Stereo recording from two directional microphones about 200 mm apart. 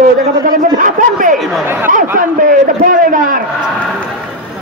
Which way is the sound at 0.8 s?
40° right (ahead or behind).